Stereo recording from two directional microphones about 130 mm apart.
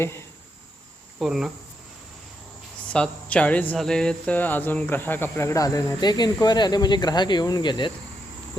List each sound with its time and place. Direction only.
1.2 s cricket: 5° right (ahead or behind)
2.9 s speech: 10° left (ahead or behind); by 7.9 s 35° left (ahead or behind)